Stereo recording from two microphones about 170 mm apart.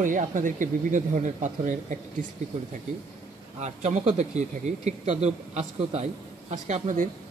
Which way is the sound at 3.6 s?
45° right (ahead or behind).